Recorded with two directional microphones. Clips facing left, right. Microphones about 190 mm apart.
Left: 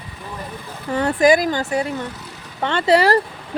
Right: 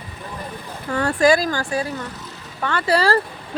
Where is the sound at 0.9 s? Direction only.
20° left (ahead or behind).